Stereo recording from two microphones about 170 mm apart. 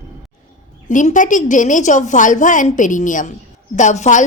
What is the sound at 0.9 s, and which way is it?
A woman's voice, 50° left (ahead or behind).